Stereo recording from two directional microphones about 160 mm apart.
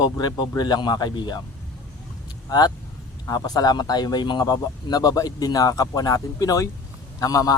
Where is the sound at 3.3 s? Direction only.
25° left (ahead or behind).